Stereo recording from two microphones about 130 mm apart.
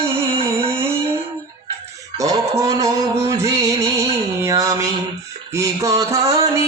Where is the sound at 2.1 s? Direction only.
25° right (ahead or behind).